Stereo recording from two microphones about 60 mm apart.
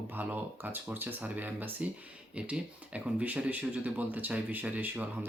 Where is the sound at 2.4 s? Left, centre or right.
Centre.